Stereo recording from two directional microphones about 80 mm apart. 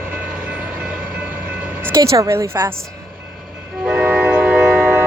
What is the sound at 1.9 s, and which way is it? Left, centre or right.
Speech, right.